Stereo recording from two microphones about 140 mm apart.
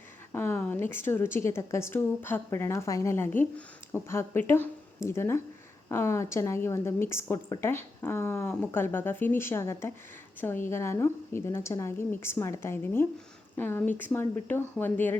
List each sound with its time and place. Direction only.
0.3 s a woman's voice: 15° left (ahead or behind)